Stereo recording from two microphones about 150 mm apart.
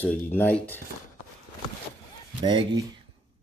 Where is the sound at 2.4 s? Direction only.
30° right (ahead or behind).